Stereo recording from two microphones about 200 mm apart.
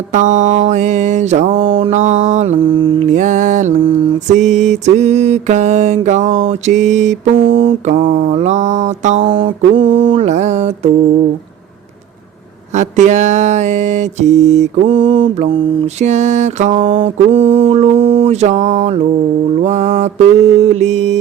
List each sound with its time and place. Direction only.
0.1 s mantra: 40° right (ahead or behind)
7.9 s mantra: 40° right (ahead or behind)
12.7 s mantra: 35° right (ahead or behind)
16.0 s mantra: 35° right (ahead or behind)